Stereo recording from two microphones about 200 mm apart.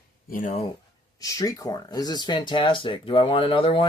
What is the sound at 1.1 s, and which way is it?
Speech, 15° left (ahead or behind).